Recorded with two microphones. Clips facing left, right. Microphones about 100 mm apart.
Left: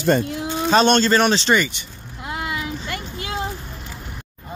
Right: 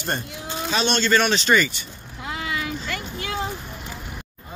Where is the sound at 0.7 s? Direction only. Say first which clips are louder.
Left 8 dB; 40° left (ahead or behind).